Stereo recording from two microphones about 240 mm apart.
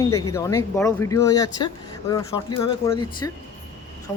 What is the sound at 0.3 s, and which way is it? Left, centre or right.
Speech, centre.